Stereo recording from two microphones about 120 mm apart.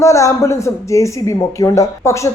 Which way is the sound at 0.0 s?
25° left (ahead or behind).